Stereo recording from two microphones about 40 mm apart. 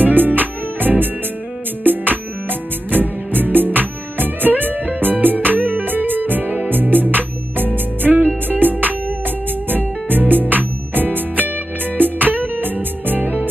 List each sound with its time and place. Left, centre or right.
0.0 s music: right
2.9 s music: right